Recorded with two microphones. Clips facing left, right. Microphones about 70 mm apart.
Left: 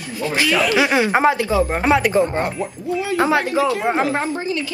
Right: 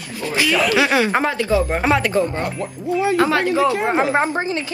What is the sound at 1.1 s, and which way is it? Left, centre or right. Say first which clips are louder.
Speech: left 2 dB; centre.